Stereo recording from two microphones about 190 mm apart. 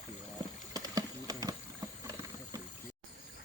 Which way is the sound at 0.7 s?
20° right (ahead or behind).